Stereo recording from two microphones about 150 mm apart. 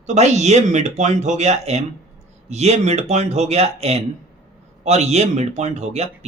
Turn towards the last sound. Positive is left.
turn(degrees=-45)  # may be behind; listen again after turning